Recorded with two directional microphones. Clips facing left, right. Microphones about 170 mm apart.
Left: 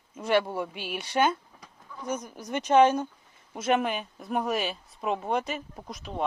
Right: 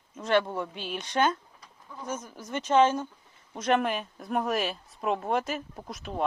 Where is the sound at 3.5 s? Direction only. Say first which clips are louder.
Even; 5° left (ahead or behind).